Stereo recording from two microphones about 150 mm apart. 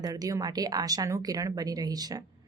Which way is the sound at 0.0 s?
25° right (ahead or behind).